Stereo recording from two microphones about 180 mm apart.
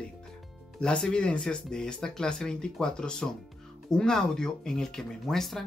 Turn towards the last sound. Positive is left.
turn(degrees=0)  # may be behind; listen again after turning